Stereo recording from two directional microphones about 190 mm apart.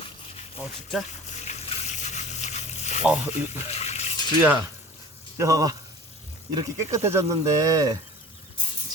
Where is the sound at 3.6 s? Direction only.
35° left (ahead or behind).